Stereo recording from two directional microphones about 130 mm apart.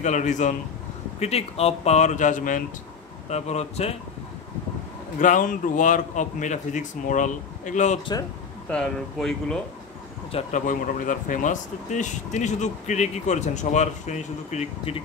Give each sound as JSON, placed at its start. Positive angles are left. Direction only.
{"t": 0.0, "sound": "speech", "side_deg": 70}
{"t": 1.2, "sound": "speech", "side_deg": 55}
{"t": 3.3, "sound": "speech", "side_deg": 55}
{"t": 5.2, "sound": "speech", "side_deg": 85}
{"t": 8.0, "sound": "speech", "side_deg": 30}
{"t": 8.6, "sound": "speech", "side_deg": 5}
{"t": 10.5, "sound": "speech", "side_deg": 90}